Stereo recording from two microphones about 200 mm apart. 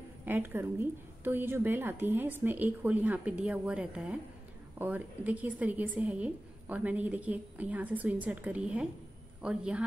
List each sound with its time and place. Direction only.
0.2 s a woman's voice: 10° right (ahead or behind)